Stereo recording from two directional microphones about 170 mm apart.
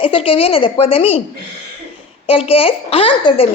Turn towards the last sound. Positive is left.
turn(degrees=30)  # may be behind; listen again after turning